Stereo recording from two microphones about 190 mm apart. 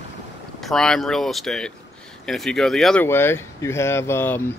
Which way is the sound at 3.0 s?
10° left (ahead or behind).